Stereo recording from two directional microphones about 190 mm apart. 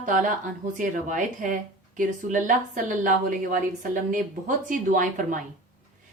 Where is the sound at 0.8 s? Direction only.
40° right (ahead or behind).